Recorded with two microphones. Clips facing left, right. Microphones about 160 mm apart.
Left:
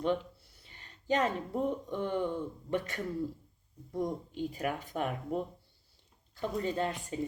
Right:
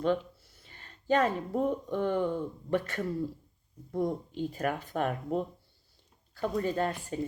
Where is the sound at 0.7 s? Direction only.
15° left (ahead or behind).